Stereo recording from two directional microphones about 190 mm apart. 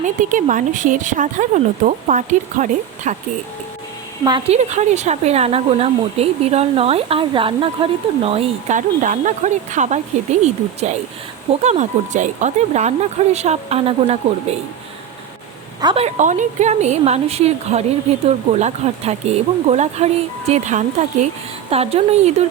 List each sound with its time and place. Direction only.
0.0 s speech: 45° right (ahead or behind)
4.2 s speech: 25° right (ahead or behind)
15.8 s a woman's voice: 25° right (ahead or behind)
16.0 s speech: 40° right (ahead or behind)